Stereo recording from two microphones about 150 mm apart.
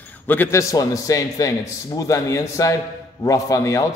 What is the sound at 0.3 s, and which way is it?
A man's voice, 15° left (ahead or behind).